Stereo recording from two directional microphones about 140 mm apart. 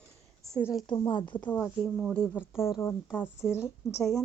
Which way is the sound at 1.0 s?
35° left (ahead or behind).